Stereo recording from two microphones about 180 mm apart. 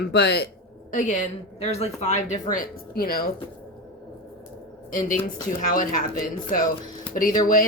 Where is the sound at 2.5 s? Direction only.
55° left (ahead or behind).